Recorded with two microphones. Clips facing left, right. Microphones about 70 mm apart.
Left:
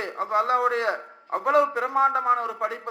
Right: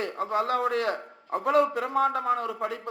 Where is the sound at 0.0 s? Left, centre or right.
Left.